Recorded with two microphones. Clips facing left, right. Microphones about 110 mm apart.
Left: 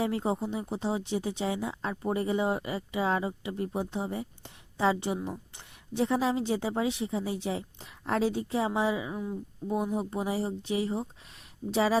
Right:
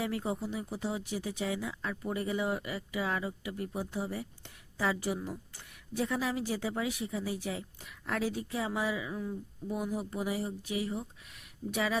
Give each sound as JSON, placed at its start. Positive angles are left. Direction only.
{"t": 0.0, "sound": "a woman's voice", "side_deg": 30}